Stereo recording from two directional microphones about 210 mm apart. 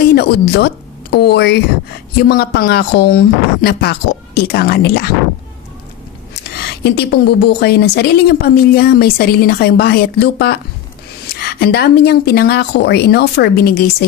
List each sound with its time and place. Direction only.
0.1 s a woman's voice: 50° left (ahead or behind)
6.3 s a woman's voice: 50° left (ahead or behind)